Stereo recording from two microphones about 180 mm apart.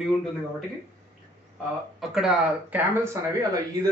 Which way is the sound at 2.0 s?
5° right (ahead or behind).